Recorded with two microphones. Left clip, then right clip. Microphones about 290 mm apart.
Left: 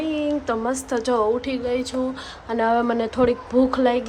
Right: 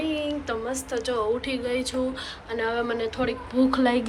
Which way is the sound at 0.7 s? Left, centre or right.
Left.